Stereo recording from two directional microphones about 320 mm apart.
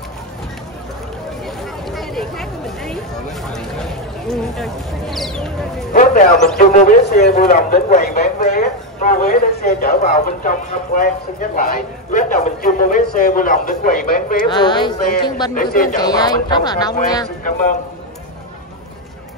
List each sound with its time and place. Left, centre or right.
1.9 s a sound: centre
3.4 s speech: centre
6.7 s a man's voice: left
14.5 s speech: centre
15.5 s a man's voice: left
16.0 s speech: centre
17.5 s a man's voice: left